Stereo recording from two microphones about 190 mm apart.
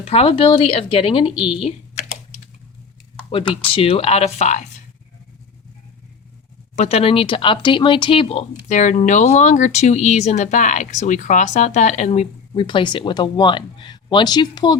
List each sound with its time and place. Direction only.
0.0 s speech: 30° left (ahead or behind)
3.3 s speech: 30° left (ahead or behind)
6.7 s speech: 35° left (ahead or behind)